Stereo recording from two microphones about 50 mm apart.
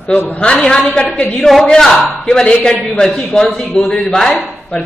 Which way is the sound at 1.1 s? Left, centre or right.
Left.